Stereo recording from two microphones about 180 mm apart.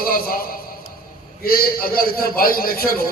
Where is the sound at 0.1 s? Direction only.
55° left (ahead or behind).